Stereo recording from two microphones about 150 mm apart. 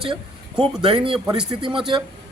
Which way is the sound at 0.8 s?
35° right (ahead or behind).